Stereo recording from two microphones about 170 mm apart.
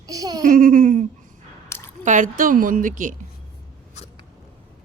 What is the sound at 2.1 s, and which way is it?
A woman's voice, 50° right (ahead or behind).